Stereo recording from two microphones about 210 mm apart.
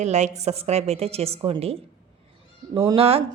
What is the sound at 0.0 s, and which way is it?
A woman's voice, 35° right (ahead or behind).